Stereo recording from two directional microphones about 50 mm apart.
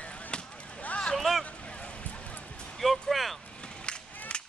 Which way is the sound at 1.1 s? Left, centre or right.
Centre.